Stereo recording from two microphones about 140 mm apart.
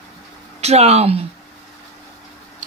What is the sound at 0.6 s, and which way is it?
Speech, 50° right (ahead or behind).